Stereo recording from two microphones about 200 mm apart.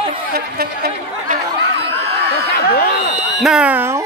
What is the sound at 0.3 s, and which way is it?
Chatter, 50° right (ahead or behind).